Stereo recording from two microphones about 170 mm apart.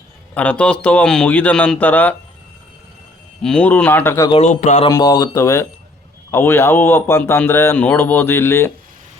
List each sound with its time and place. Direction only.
0.3 s speech: 5° left (ahead or behind)
3.4 s speech: 5° left (ahead or behind)
4.4 s speech: 45° left (ahead or behind)
4.9 s speech: 25° left (ahead or behind)